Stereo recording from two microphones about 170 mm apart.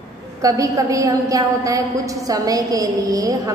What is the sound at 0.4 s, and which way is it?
A woman's voice, 20° right (ahead or behind).